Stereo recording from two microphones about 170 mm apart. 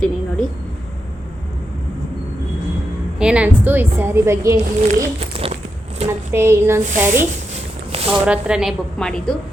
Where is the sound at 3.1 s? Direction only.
5° right (ahead or behind).